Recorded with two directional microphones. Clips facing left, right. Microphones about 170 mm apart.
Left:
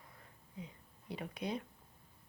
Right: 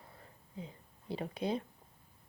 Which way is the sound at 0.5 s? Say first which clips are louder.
Right 3 dB; 30° right (ahead or behind).